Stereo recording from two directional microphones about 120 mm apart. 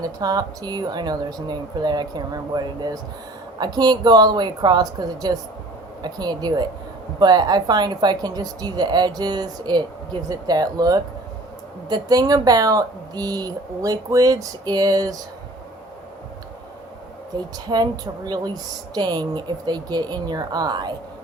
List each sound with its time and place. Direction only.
0.0 s a woman's voice: 35° right (ahead or behind)
17.3 s a woman's voice: 35° right (ahead or behind)